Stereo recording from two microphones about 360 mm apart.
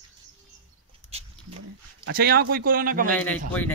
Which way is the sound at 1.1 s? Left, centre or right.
Centre.